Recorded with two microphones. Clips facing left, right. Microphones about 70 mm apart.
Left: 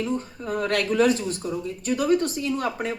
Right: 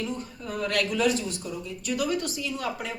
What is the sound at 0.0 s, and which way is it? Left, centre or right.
Speech, left.